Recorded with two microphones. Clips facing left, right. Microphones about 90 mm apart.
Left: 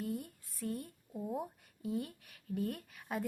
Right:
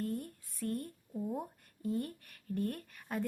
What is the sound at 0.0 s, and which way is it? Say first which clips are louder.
Speech: right 2 dB; 5° left (ahead or behind).